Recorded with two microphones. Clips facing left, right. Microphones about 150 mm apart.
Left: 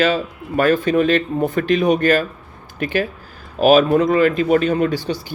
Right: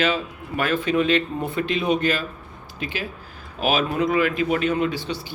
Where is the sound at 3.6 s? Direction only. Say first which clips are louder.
Left 9 dB; 45° left (ahead or behind).